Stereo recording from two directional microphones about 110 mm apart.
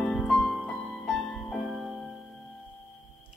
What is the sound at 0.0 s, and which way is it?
Music, 10° left (ahead or behind).